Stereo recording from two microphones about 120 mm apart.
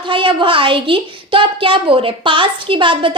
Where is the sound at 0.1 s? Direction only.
45° right (ahead or behind).